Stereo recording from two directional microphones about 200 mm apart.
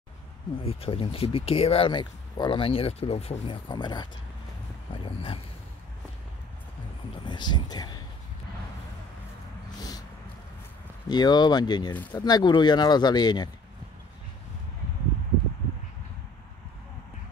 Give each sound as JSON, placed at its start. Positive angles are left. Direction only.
{"t": 0.6, "sound": "speech", "side_deg": 30}
{"t": 7.2, "sound": "speech", "side_deg": 20}
{"t": 9.8, "sound": "a sound", "side_deg": 20}
{"t": 11.1, "sound": "speech", "side_deg": 20}